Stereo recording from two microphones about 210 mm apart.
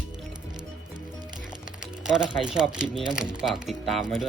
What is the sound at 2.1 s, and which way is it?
Speech, 5° right (ahead or behind).